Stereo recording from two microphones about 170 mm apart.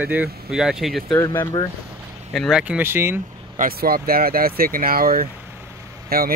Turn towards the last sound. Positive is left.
turn(degrees=-60)  # may be behind; listen again after turning